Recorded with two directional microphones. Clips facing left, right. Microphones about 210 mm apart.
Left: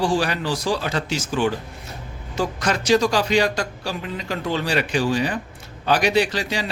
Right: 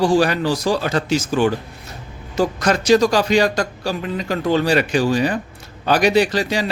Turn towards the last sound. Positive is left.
turn(degrees=-40)  # may be behind; listen again after turning